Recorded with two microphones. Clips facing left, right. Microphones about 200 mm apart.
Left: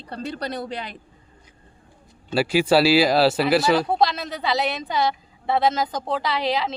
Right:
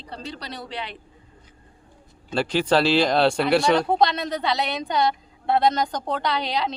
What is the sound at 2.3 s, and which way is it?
Speech, 10° left (ahead or behind).